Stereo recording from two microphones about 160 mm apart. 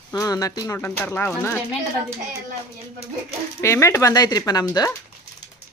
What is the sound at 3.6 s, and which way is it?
Speech, 15° left (ahead or behind).